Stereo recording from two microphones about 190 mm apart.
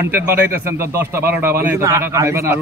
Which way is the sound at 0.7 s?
15° right (ahead or behind).